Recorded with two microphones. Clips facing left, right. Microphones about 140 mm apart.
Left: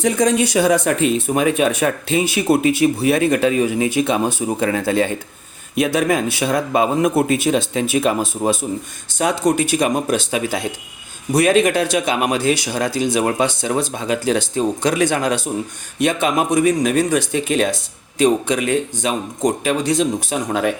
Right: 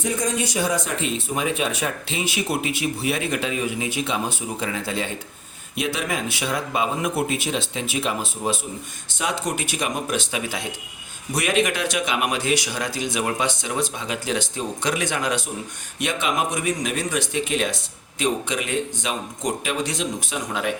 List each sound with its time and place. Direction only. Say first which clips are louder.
0.0 s a man's voice: left 8 dB; 80° left; by 20.7 s 40° left (ahead or behind)